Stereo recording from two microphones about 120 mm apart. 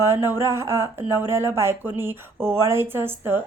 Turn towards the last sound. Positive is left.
turn(degrees=-20)  # may be behind; listen again after turning